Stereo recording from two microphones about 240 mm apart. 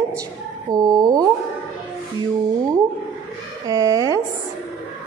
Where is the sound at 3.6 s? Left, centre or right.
Centre.